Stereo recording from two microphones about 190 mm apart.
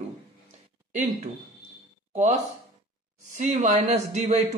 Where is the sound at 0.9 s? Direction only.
40° right (ahead or behind).